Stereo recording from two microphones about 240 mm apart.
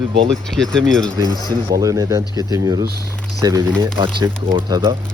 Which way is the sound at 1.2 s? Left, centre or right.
Centre.